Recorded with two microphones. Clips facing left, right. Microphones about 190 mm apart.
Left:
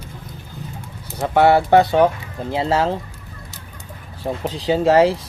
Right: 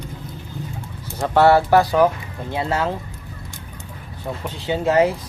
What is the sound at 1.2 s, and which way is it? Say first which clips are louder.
Speech: even; 15° left (ahead or behind).